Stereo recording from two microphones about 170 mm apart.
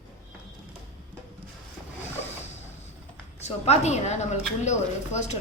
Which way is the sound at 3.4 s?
40° left (ahead or behind).